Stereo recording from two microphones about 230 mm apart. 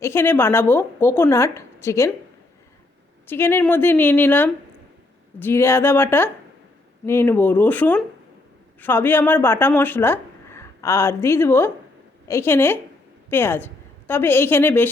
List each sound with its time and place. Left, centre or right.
0.0 s a woman's voice: centre
3.2 s a woman's voice: centre